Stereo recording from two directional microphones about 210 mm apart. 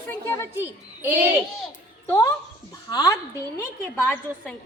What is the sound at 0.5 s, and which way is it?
Speech, 10° right (ahead or behind).